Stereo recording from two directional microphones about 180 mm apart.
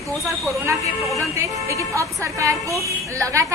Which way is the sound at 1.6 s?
15° right (ahead or behind).